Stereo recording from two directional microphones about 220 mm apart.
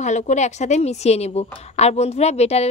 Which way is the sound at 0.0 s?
35° left (ahead or behind).